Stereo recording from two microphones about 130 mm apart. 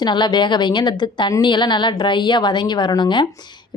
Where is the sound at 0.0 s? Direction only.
35° left (ahead or behind).